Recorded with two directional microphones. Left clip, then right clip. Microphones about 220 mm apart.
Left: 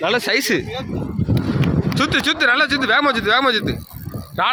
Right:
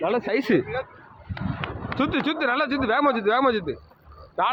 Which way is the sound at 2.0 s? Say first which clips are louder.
Left 7 dB; 5° left (ahead or behind).